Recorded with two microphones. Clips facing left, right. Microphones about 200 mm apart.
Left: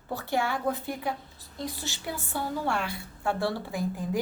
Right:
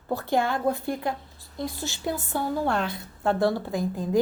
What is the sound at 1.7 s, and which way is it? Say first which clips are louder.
Speech: right 6 dB; 15° right (ahead or behind).